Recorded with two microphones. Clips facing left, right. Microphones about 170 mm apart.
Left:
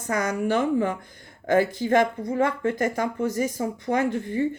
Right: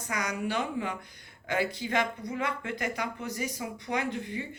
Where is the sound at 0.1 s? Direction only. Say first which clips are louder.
Left 8 dB; 50° left (ahead or behind).